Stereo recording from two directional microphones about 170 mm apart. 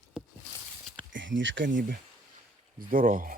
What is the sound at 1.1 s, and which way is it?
Speech, 90° right.